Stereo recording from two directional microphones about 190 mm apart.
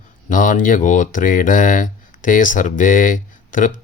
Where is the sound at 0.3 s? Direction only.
45° left (ahead or behind).